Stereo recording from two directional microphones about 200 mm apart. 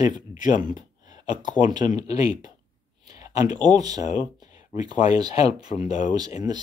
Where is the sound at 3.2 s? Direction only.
20° right (ahead or behind).